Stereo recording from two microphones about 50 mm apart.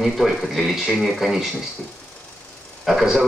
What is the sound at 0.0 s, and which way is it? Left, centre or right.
Speech, centre.